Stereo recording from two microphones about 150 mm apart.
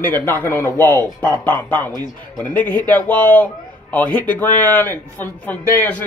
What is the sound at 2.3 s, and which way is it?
Speech, 10° left (ahead or behind).